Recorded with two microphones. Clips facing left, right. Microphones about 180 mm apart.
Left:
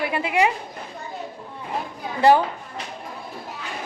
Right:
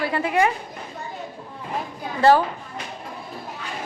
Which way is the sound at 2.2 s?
20° left (ahead or behind).